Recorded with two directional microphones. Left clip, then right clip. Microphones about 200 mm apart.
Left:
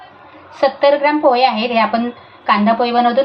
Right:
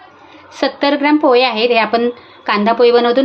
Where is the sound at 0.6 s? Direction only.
60° right (ahead or behind).